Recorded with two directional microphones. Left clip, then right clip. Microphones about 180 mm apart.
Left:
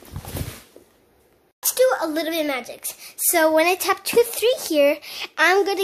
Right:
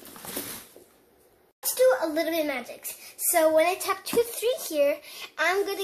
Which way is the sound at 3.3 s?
60° left (ahead or behind).